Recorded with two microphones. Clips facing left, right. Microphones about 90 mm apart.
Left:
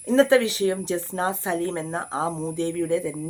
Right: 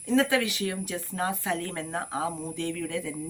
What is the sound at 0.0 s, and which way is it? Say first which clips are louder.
Speech: left 7 dB; 35° left (ahead or behind).